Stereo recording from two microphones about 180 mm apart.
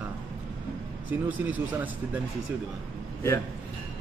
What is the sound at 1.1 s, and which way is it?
Speech, 10° right (ahead or behind).